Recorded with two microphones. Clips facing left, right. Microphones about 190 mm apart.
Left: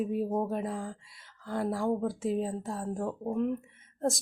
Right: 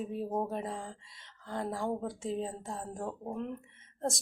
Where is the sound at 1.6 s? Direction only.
15° right (ahead or behind).